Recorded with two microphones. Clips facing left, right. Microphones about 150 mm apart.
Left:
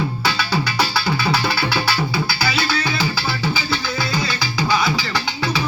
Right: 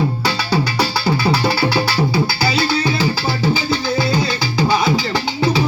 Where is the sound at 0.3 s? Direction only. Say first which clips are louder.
Right 3 dB; 35° right (ahead or behind).